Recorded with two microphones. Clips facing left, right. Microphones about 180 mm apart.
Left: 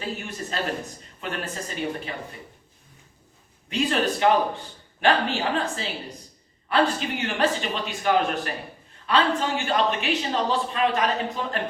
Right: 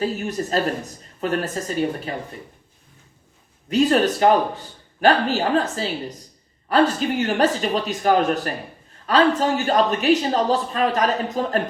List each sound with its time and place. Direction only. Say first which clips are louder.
0.0 s speech: right 8 dB; 40° right (ahead or behind)
3.7 s speech: right 7 dB; 40° right (ahead or behind)